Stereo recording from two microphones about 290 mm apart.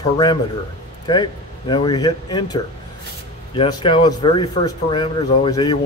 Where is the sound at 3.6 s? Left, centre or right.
Centre.